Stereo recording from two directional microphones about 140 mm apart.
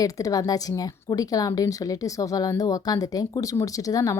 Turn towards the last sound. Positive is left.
turn(degrees=25)  # may be behind; listen again after turning